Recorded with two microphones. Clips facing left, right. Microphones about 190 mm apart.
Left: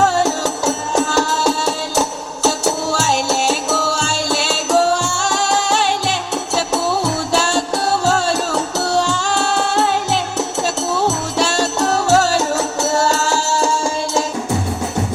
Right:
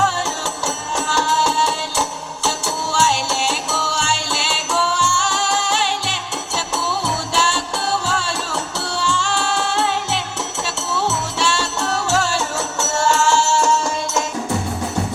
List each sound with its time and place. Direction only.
0.0 s music: 40° left (ahead or behind)